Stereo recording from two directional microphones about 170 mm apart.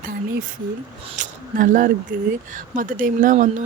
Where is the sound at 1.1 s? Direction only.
50° right (ahead or behind).